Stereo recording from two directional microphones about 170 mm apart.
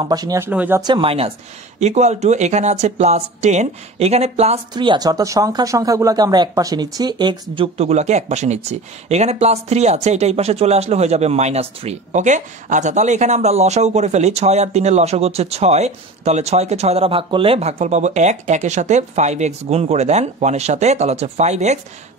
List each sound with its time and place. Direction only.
0.0 s speech: 20° right (ahead or behind)
0.5 s speech: 10° right (ahead or behind)
0.8 s speech: 30° right (ahead or behind)
4.7 s speech: 25° right (ahead or behind); by 21.7 s 40° right (ahead or behind)